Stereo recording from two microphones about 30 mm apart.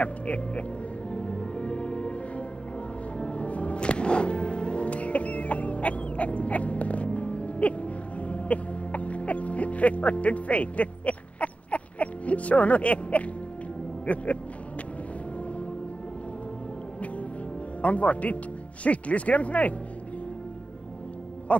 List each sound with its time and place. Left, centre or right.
0.0 s speech: left
1.1 s music: left
3.2 s music: left
4.8 s a sound: left
7.2 s music: left
14.0 s speech: left
17.8 s speech: left
21.5 s a sound: left